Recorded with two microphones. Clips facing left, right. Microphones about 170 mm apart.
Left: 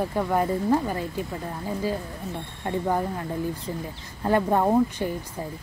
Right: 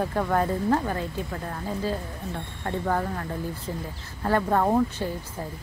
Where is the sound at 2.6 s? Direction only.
15° left (ahead or behind).